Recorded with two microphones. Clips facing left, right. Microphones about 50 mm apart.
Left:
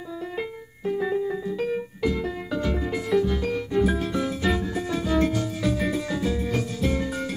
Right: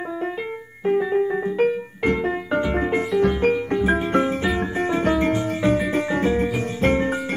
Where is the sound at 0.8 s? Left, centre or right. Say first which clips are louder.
Right 5 dB; right.